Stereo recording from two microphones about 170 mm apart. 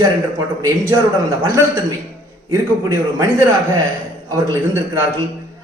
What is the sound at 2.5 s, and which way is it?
Speech, 15° right (ahead or behind).